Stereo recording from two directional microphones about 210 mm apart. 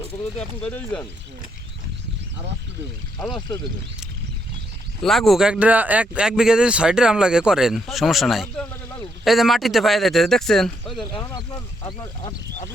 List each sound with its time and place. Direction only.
0.6 s speech: 5° left (ahead or behind)
5.0 s speech: centre (ahead or behind)
11.1 s speech: 20° left (ahead or behind)